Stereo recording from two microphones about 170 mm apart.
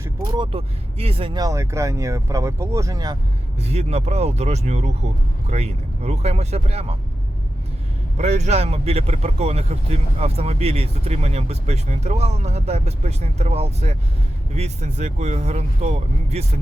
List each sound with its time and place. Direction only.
0.3 s speech: 35° right (ahead or behind)
3.6 s speech: 40° right (ahead or behind)
8.2 s speech: 40° right (ahead or behind)